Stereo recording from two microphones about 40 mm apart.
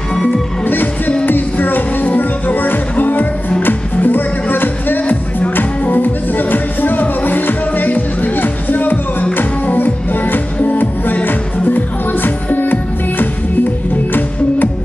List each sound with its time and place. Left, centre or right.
0.7 s music: left